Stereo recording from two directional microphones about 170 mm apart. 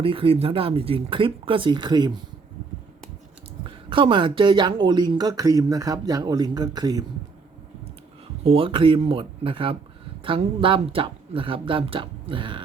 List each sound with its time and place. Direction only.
0.0 s speech: 30° right (ahead or behind)
3.8 s speech: 30° right (ahead or behind)
8.4 s speech: 30° right (ahead or behind)